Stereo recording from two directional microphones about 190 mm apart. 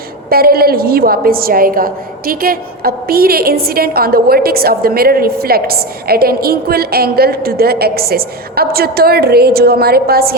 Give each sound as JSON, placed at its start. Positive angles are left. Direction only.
{"t": 0.3, "sound": "a woman's voice", "side_deg": -50}